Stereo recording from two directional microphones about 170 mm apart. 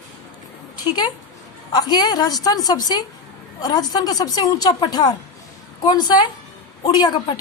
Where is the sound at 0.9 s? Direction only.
25° left (ahead or behind).